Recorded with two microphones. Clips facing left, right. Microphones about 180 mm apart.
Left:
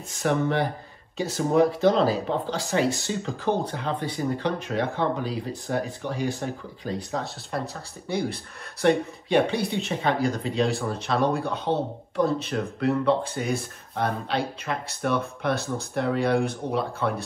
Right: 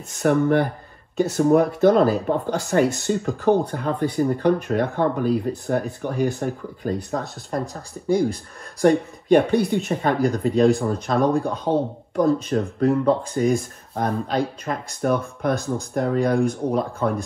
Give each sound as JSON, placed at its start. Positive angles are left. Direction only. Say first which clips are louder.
{"t": 0.1, "sound": "speech", "louder": "right 6 dB", "side_deg": -55}
{"t": 8.8, "sound": "speech", "louder": "right 4 dB", "side_deg": -40}
{"t": 9.3, "sound": "speech", "louder": "right 6 dB", "side_deg": -55}
{"t": 10.2, "sound": "speech", "louder": "right 7 dB", "side_deg": -40}